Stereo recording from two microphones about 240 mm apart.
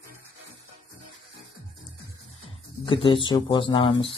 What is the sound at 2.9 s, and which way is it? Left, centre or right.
Speech, left.